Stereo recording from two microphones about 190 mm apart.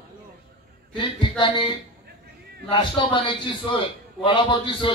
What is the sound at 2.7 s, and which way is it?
A man's voice, 25° left (ahead or behind).